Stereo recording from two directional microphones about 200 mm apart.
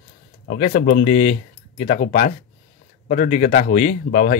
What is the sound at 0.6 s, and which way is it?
Speech, 40° left (ahead or behind).